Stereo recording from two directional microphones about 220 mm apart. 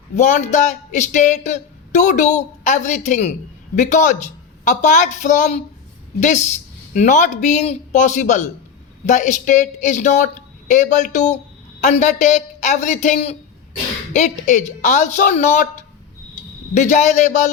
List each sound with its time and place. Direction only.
0.2 s speech: 30° left (ahead or behind)
16.7 s speech: 35° left (ahead or behind)